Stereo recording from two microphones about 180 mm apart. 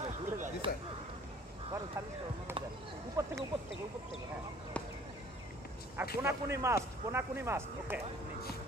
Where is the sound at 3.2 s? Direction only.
20° right (ahead or behind).